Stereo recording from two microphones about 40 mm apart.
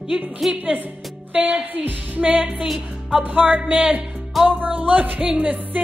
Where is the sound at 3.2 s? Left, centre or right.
Right.